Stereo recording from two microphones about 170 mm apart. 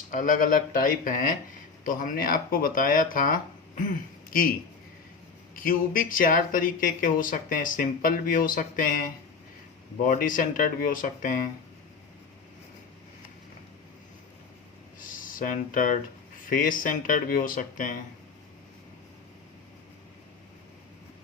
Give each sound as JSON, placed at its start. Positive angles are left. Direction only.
{"t": 0.1, "sound": "speech", "side_deg": 50}
{"t": 5.5, "sound": "speech", "side_deg": 55}
{"t": 15.1, "sound": "speech", "side_deg": 55}